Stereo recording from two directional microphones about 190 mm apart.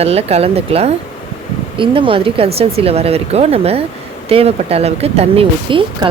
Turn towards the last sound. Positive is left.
turn(degrees=-25)  # may be behind; listen again after turning